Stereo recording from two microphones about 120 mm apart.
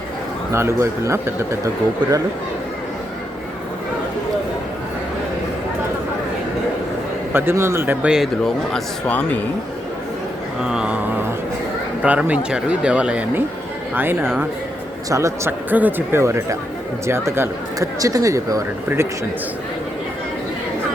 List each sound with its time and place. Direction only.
0.5 s speech: 25° right (ahead or behind)
7.3 s speech: 20° right (ahead or behind)
8.0 s speech: 5° right (ahead or behind); by 9.4 s 10° left (ahead or behind)
10.6 s a sound: 5° right (ahead or behind)
12.0 s speech: 10° right (ahead or behind)
15.7 s speech: 15° right (ahead or behind)